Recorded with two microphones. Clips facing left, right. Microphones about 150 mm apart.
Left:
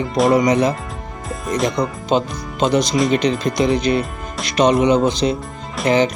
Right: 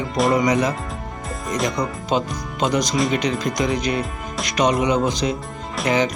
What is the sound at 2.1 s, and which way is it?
Speech, 30° left (ahead or behind).